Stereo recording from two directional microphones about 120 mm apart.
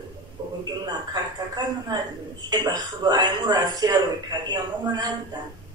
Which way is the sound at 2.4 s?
35° right (ahead or behind).